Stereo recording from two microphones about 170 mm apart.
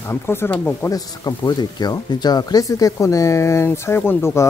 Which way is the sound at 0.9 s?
20° left (ahead or behind).